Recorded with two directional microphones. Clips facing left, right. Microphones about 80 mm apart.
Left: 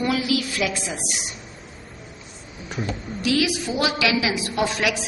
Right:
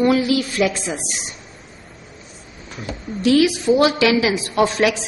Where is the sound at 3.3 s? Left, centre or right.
Right.